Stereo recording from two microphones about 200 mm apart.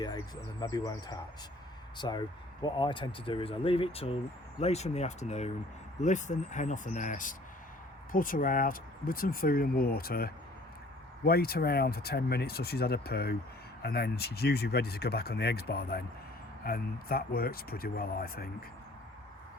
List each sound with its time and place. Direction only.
0.6 s speech: 20° left (ahead or behind); by 18.4 s 50° left (ahead or behind)